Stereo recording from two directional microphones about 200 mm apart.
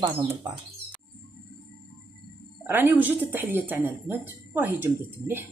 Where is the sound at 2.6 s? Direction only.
10° right (ahead or behind).